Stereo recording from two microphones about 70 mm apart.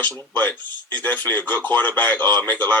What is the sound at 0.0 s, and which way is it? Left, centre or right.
Speech, left.